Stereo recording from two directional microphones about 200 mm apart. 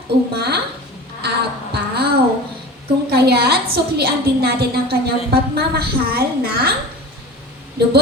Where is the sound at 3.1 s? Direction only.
50° right (ahead or behind).